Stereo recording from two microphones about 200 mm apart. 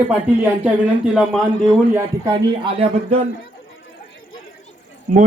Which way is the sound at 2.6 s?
30° right (ahead or behind).